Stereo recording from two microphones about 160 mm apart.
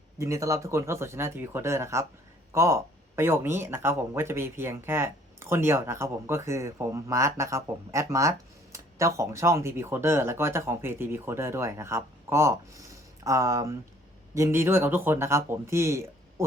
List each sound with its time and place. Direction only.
0.2 s speech: 20° right (ahead or behind)